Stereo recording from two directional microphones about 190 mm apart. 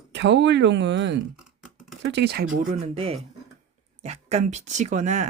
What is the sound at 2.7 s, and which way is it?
Speech, 30° right (ahead or behind).